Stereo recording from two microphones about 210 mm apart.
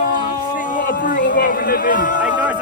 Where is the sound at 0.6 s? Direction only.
40° left (ahead or behind).